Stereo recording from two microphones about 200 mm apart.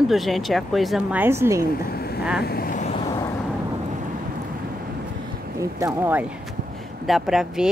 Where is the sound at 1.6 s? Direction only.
45° left (ahead or behind).